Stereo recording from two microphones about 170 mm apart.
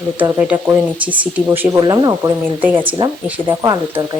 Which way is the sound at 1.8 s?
25° right (ahead or behind).